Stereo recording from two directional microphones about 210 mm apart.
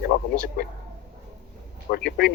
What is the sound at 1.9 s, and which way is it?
Speech, 50° left (ahead or behind).